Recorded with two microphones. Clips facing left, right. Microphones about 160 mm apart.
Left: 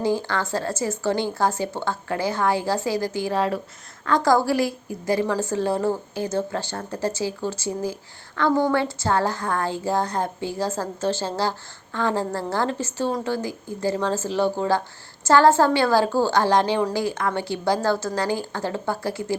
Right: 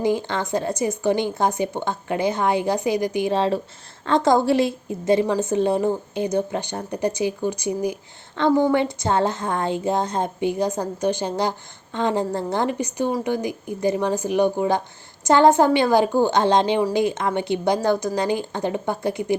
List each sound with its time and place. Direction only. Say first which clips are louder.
0.0 s a woman's voice: right 1 dB; 20° right (ahead or behind)